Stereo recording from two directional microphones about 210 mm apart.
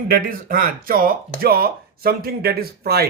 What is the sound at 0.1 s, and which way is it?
A man's voice, 45° right (ahead or behind).